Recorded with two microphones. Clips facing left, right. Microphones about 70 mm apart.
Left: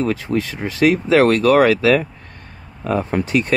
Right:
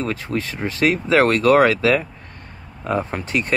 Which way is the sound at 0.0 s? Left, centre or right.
Right.